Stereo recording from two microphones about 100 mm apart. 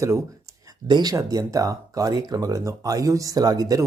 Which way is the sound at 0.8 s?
45° right (ahead or behind).